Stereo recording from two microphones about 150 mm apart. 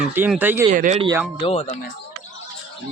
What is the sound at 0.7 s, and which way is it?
Speech, 55° right (ahead or behind).